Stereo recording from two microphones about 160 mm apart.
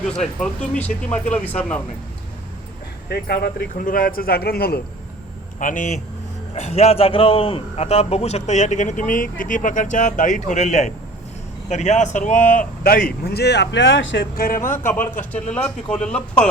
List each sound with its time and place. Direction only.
0.2 s speech: 5° left (ahead or behind)
3.1 s speech: 75° left (ahead or behind)
5.5 s speech: 55° left (ahead or behind)
6.5 s a man's voice: 40° left (ahead or behind); by 14.8 s 60° left (ahead or behind)
15.3 s speech: 10° left (ahead or behind)